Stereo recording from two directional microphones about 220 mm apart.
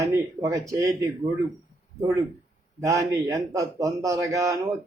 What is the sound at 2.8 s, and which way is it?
A man's voice, 15° right (ahead or behind).